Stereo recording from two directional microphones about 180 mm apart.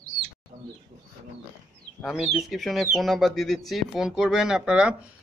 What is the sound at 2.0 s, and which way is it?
Speech, centre (ahead or behind).